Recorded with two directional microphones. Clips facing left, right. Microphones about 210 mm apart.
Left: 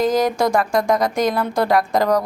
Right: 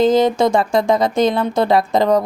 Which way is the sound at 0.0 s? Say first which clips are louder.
Right 4 dB; 25° right (ahead or behind).